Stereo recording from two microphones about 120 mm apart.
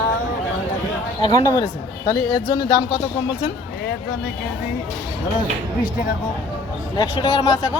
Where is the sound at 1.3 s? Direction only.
35° left (ahead or behind).